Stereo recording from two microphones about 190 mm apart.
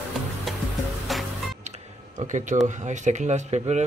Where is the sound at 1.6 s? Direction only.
35° right (ahead or behind).